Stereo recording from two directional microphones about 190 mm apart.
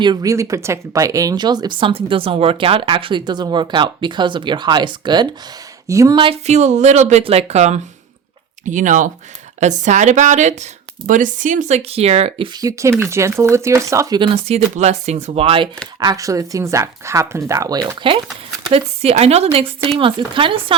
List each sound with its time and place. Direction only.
0.0 s speech: 20° right (ahead or behind)
12.5 s speech: 15° right (ahead or behind)